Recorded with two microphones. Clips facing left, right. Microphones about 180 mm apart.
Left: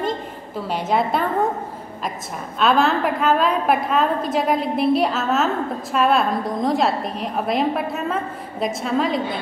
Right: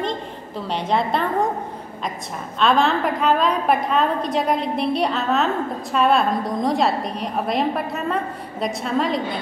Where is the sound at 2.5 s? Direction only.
5° left (ahead or behind).